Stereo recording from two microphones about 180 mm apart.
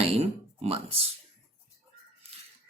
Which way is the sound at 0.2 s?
35° right (ahead or behind).